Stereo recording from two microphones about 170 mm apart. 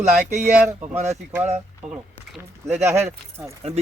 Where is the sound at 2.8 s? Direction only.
15° right (ahead or behind).